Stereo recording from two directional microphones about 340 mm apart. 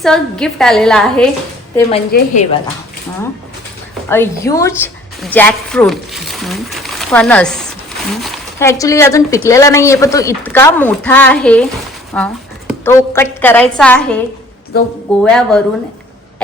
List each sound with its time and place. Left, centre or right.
0.0 s a woman's voice: centre
2.1 s a woman's voice: left
4.1 s a woman's voice: centre
15.2 s a woman's voice: centre